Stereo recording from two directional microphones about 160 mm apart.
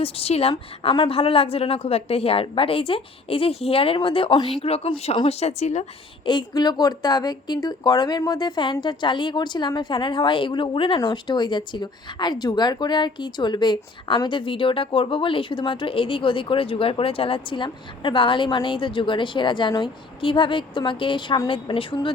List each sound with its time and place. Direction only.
0.0 s a woman's voice: 40° left (ahead or behind)
6.2 s a woman's voice: 30° left (ahead or behind)